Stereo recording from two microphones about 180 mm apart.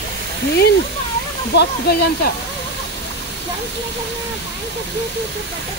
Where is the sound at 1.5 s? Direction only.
65° left (ahead or behind).